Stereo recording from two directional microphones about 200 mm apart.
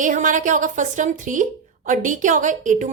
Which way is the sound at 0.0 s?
40° right (ahead or behind).